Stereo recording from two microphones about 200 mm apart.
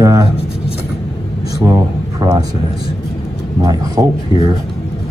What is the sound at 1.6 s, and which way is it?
Speech, 15° right (ahead or behind).